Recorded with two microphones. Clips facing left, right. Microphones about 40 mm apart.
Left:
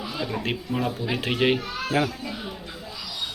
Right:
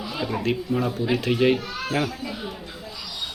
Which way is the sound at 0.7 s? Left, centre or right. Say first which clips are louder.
Right 2 dB; centre.